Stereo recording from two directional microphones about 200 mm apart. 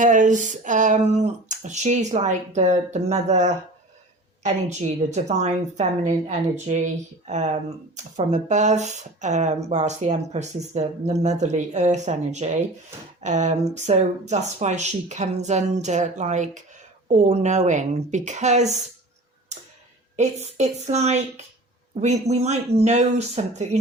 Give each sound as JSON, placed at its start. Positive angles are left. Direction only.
{"t": 0.0, "sound": "speech", "side_deg": -40}
{"t": 20.1, "sound": "speech", "side_deg": -35}